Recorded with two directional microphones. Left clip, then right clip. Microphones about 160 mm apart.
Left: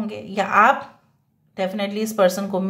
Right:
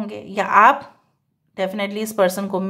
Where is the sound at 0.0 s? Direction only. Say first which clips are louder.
Right 1 dB; 35° right (ahead or behind).